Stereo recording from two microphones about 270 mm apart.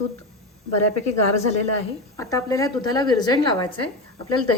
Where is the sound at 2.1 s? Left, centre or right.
Centre.